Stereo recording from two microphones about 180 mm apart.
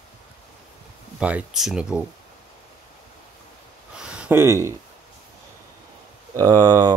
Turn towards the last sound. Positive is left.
turn(degrees=-20)  # may be behind; listen again after turning